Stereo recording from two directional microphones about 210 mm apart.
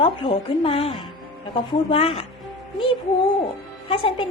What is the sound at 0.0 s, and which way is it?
A woman's voice, 25° left (ahead or behind).